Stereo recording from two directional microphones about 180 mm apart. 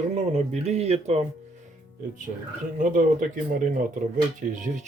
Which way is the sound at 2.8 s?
45° right (ahead or behind).